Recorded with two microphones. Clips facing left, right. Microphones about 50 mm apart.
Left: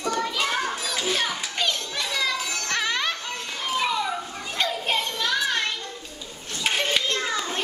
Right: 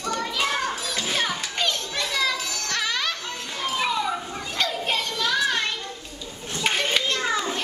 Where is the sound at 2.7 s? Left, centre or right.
Centre.